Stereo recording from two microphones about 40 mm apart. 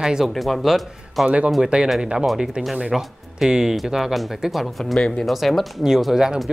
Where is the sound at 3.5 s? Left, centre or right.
Centre.